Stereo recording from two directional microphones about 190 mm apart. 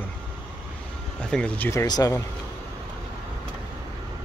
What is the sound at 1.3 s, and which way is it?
Speech, 5° left (ahead or behind).